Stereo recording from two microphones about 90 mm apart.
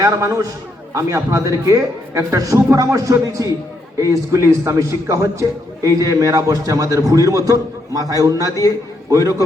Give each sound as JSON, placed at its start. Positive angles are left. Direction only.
{"t": 0.0, "sound": "a man's voice", "side_deg": -40}